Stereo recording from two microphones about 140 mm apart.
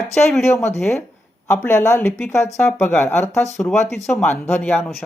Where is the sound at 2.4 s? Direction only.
20° left (ahead or behind).